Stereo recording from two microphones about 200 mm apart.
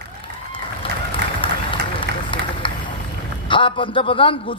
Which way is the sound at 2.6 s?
25° left (ahead or behind).